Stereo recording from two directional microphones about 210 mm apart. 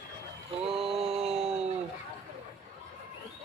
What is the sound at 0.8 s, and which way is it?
Mantra, centre (ahead or behind).